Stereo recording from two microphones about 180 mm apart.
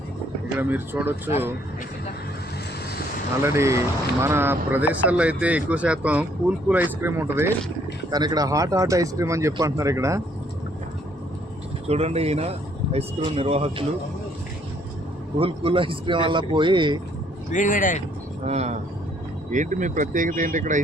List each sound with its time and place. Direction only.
0.6 s speech: 10° right (ahead or behind)
3.4 s speech: 15° right (ahead or behind)
11.9 s speech: 35° right (ahead or behind)
15.4 s speech: 30° right (ahead or behind)
17.5 s speech: 45° left (ahead or behind)
18.4 s speech: 40° right (ahead or behind)